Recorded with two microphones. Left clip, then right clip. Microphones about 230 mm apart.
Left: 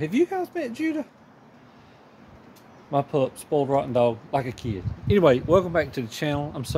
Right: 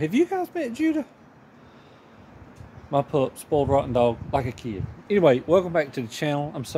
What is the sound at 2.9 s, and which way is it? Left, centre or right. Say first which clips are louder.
Speech: right 1 dB; centre.